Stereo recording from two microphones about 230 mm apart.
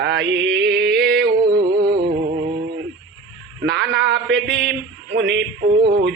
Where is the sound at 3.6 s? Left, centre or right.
Right.